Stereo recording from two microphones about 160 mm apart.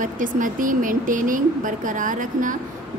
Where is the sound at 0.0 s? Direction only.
55° right (ahead or behind).